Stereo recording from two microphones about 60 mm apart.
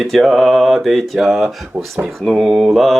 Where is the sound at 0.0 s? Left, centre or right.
Centre.